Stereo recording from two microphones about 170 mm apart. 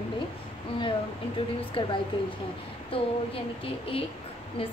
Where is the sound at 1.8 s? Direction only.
30° left (ahead or behind).